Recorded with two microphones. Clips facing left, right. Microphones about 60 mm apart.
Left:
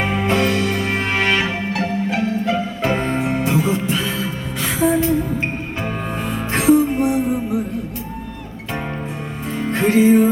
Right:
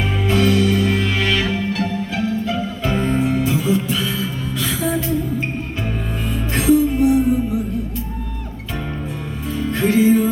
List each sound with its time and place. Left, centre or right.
0.0 s music: left
6.5 s music: left
9.6 s music: left